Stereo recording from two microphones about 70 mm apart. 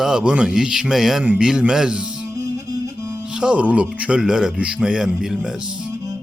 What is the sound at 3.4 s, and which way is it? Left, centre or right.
A man's voice, centre.